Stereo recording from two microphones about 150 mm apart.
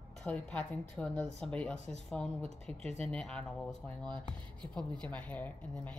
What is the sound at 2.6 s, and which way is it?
Speech, 40° right (ahead or behind).